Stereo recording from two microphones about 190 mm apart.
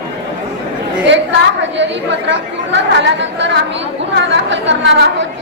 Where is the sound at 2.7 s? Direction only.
70° right (ahead or behind).